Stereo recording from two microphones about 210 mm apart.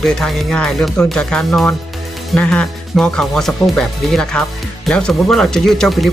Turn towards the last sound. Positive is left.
turn(degrees=0)  # may be behind; listen again after turning